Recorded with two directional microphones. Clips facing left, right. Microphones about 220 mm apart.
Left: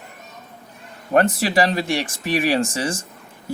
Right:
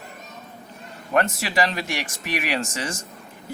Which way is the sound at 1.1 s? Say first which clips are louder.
Left 5 dB; 35° left (ahead or behind).